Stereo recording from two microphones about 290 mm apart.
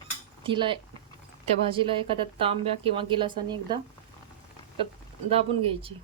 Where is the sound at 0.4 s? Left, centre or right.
Centre.